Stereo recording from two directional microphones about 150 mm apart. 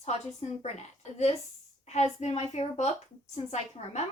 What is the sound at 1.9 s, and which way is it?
A woman's voice, 45° left (ahead or behind).